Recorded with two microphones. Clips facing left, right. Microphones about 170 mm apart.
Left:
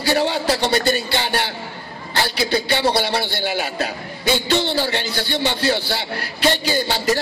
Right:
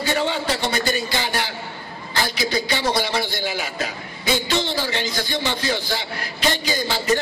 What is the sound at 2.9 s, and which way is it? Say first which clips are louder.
A man's voice: left 2 dB; 65° left (ahead or behind).